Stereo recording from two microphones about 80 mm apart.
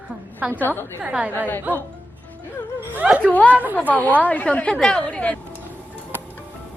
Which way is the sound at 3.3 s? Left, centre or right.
Centre.